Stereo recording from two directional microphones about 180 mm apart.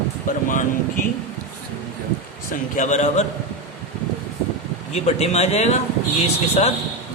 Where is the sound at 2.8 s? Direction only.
40° left (ahead or behind).